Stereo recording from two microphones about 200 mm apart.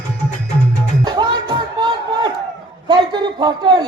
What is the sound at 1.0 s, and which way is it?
Music, 20° right (ahead or behind).